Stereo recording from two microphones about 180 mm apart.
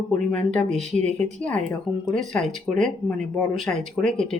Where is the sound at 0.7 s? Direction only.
40° right (ahead or behind).